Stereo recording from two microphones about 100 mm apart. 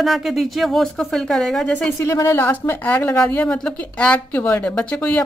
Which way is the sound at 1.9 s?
30° left (ahead or behind).